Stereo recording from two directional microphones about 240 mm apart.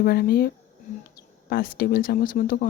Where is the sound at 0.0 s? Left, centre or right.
Left.